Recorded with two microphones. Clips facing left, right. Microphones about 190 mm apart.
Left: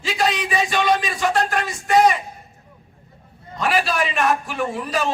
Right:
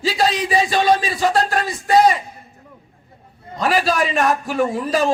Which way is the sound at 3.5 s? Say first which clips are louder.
Right 3 dB; 35° right (ahead or behind).